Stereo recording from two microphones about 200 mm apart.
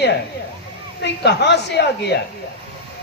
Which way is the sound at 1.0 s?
55° left (ahead or behind).